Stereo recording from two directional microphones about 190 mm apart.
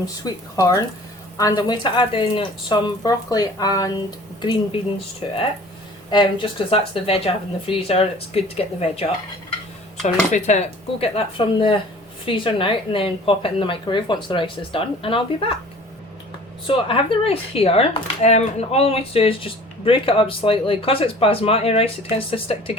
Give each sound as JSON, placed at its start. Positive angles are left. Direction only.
{"t": 0.0, "sound": "speech", "side_deg": 20}
{"t": 11.0, "sound": "speech", "side_deg": 25}
{"t": 16.6, "sound": "speech", "side_deg": 30}